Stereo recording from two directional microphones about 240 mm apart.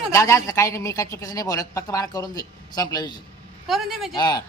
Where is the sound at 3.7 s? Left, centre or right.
Centre.